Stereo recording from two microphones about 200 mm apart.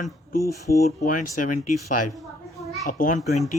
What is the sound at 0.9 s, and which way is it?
Speech, 40° left (ahead or behind).